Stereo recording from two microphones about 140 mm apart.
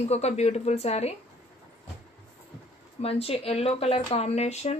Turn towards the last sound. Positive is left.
turn(degrees=50)  # may be behind; listen again after turning